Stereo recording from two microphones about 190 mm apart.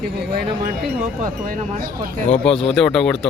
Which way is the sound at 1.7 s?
45° right (ahead or behind).